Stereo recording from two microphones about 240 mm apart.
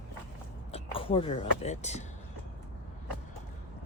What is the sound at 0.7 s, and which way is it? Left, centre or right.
Speech, left.